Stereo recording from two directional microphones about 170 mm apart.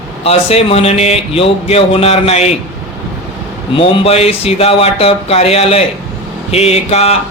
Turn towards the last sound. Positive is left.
turn(degrees=40)  # may be behind; listen again after turning